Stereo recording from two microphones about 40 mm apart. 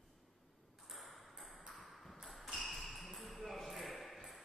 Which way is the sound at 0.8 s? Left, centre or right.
Centre.